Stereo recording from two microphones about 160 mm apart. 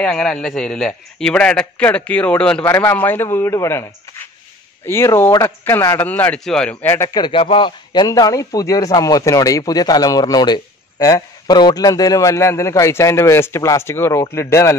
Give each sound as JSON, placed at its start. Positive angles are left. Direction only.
{"t": 0.0, "sound": "a man's voice", "side_deg": 5}
{"t": 4.8, "sound": "a man's voice", "side_deg": 15}
{"t": 7.2, "sound": "a man's voice", "side_deg": 30}